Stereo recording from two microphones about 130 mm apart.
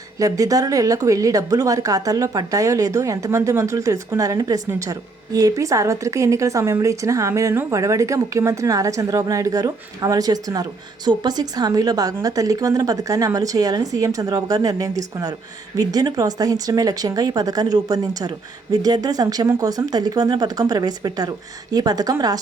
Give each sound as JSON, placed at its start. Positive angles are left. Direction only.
{"t": 0.2, "sound": "a woman's voice", "side_deg": -25}